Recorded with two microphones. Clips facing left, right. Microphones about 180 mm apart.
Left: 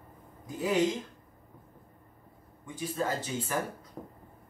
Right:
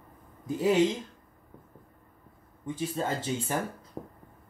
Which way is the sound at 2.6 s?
25° right (ahead or behind).